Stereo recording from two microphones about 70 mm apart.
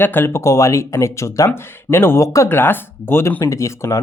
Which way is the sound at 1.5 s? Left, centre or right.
Left.